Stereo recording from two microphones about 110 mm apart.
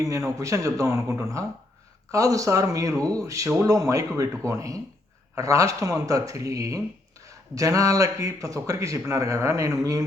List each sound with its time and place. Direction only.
0.0 s speech: 25° right (ahead or behind)